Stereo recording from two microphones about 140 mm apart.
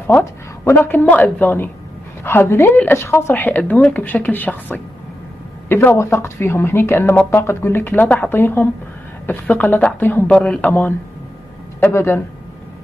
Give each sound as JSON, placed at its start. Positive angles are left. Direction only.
{"t": 0.0, "sound": "speech", "side_deg": 15}